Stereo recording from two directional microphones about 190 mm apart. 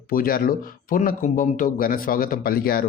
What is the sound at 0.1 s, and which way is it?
A man's voice, 50° left (ahead or behind).